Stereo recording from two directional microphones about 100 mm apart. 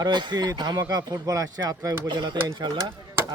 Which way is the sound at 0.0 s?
50° right (ahead or behind).